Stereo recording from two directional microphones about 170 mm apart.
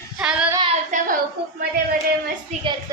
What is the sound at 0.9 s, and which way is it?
Speech, 50° right (ahead or behind).